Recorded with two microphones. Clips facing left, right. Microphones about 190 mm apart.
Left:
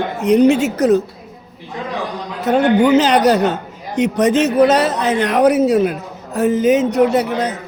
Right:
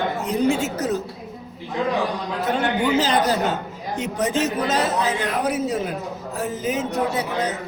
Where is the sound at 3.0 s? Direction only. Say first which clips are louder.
Left 7 dB; 70° left (ahead or behind).